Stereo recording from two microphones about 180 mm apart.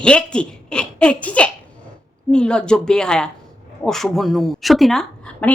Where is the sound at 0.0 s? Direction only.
5° left (ahead or behind).